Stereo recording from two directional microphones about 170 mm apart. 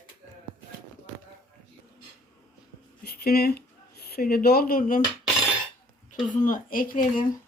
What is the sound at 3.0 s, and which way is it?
Speech, 65° left (ahead or behind).